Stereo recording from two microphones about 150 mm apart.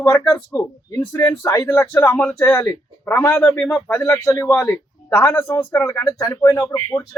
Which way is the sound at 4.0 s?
20° left (ahead or behind).